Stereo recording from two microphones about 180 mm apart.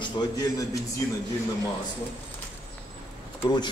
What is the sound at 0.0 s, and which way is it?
Speech, 25° left (ahead or behind).